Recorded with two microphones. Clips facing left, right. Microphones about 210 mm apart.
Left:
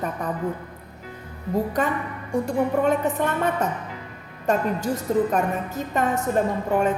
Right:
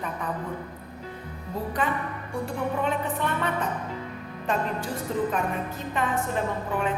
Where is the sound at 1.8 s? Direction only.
45° left (ahead or behind).